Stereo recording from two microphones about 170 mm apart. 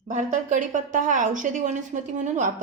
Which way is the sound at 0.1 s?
45° right (ahead or behind).